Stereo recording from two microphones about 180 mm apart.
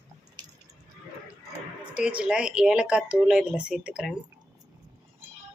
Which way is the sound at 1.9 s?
5° right (ahead or behind).